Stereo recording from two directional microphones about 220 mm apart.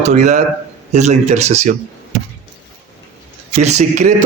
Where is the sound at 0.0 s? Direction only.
30° right (ahead or behind).